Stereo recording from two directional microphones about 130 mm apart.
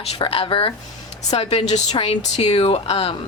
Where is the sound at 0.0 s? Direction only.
45° left (ahead or behind).